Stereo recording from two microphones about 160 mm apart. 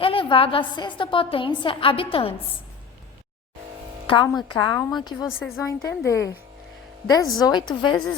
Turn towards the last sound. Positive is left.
turn(degrees=30)  # may be behind; listen again after turning